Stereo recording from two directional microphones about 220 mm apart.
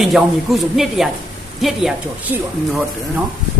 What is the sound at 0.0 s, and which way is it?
Speech, centre (ahead or behind).